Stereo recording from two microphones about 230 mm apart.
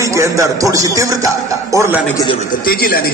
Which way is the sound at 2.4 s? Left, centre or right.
Left.